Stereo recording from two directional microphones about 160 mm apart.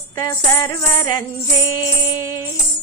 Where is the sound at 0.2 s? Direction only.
20° left (ahead or behind).